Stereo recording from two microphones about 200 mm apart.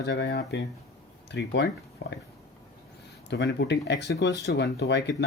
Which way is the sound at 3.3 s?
60° left (ahead or behind).